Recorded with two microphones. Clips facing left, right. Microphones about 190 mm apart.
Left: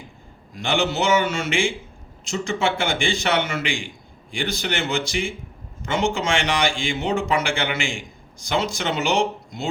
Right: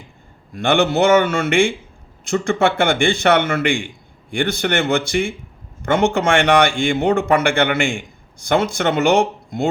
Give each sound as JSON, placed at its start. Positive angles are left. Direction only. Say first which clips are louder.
{"t": 0.5, "sound": "speech", "louder": "right 6 dB", "side_deg": -55}